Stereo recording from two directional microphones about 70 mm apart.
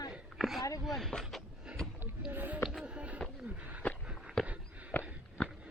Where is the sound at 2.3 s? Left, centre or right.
Right.